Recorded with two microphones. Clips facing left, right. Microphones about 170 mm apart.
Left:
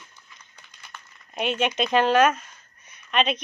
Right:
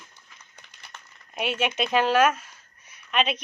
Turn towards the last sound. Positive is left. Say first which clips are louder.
# left 2 dB
turn(degrees=-5)  # may be behind; listen again after turning